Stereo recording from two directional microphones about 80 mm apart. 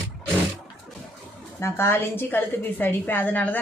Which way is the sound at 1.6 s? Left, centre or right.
Left.